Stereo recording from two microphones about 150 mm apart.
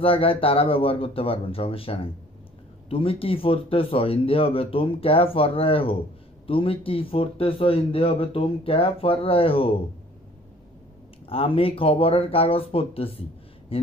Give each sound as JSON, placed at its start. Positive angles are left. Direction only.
{"t": 0.0, "sound": "speech", "side_deg": 40}
{"t": 11.3, "sound": "speech", "side_deg": 40}